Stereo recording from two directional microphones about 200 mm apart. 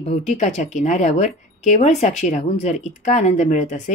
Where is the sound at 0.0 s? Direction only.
35° left (ahead or behind).